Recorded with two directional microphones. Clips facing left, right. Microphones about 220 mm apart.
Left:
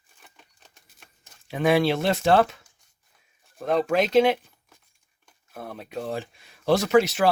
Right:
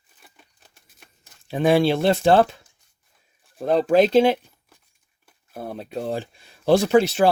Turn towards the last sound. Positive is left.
turn(degrees=-30)  # may be behind; listen again after turning